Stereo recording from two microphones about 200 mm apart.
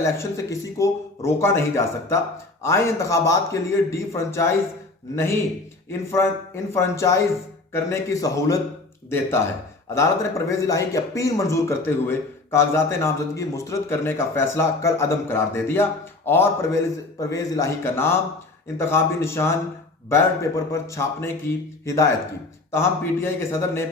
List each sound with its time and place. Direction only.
0.8 s speech: 15° left (ahead or behind)